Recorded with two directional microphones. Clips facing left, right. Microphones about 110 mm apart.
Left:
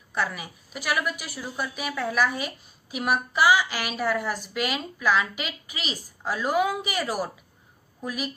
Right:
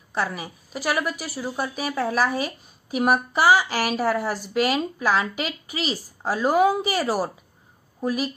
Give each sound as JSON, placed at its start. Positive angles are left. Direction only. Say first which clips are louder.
{"t": 0.1, "sound": "a woman's voice", "louder": "right 2 dB", "side_deg": -35}